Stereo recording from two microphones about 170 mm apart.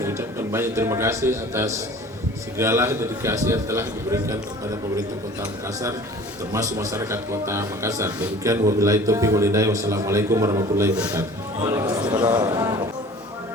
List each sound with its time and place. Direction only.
0.0 s a man's voice: 15° right (ahead or behind)